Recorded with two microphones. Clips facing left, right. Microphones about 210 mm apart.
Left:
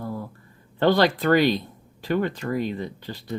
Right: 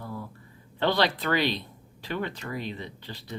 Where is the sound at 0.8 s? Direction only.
45° left (ahead or behind).